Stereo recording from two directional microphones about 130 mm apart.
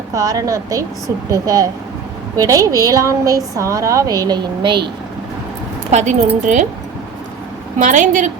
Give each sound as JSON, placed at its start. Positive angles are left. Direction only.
{"t": 0.1, "sound": "a woman's voice", "side_deg": -30}
{"t": 5.9, "sound": "speech", "side_deg": -60}
{"t": 6.4, "sound": "a woman's voice", "side_deg": -75}
{"t": 7.8, "sound": "a woman's voice", "side_deg": -75}